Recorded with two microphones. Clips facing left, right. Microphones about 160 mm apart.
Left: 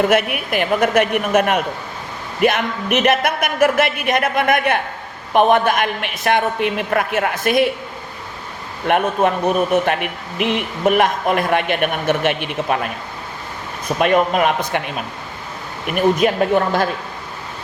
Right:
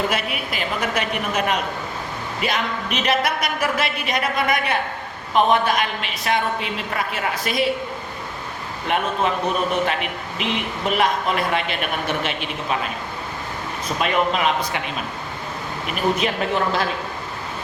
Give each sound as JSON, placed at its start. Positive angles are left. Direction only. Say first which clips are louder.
{"t": 0.1, "sound": "a man's voice", "louder": "left 8 dB", "side_deg": 60}
{"t": 8.9, "sound": "a man's voice", "louder": "left 5 dB", "side_deg": 55}
{"t": 14.0, "sound": "speech", "louder": "left 5 dB", "side_deg": 50}